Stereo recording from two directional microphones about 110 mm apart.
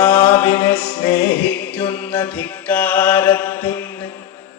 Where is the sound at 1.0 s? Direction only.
45° left (ahead or behind).